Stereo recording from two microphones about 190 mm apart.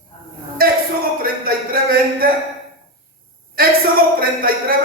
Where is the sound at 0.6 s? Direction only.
50° right (ahead or behind).